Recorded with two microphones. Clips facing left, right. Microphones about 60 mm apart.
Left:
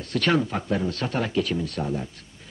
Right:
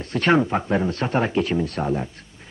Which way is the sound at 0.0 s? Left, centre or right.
Right.